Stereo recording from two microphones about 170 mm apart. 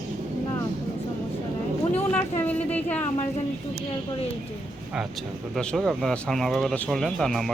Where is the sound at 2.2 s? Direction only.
10° left (ahead or behind).